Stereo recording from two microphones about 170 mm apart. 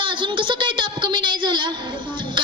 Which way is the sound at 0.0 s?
30° right (ahead or behind).